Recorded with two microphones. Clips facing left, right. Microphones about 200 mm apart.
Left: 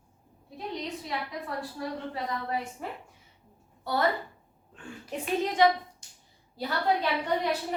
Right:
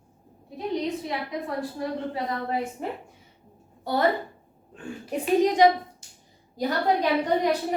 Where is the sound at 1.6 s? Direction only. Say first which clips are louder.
Right 5 dB; 20° right (ahead or behind).